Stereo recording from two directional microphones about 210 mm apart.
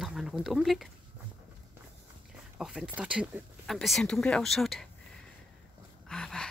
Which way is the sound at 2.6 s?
Centre (ahead or behind).